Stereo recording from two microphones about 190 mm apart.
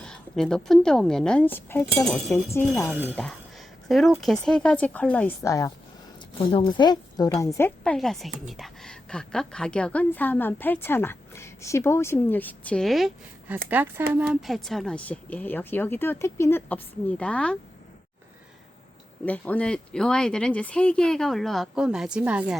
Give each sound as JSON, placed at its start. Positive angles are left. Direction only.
{"t": 0.0, "sound": "a woman's voice", "side_deg": 5}
{"t": 6.4, "sound": "a woman's voice", "side_deg": 25}
{"t": 7.9, "sound": "a woman's voice", "side_deg": 0}
{"t": 19.2, "sound": "speech", "side_deg": 10}